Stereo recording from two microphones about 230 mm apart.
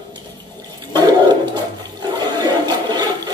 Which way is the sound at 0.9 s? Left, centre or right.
Centre.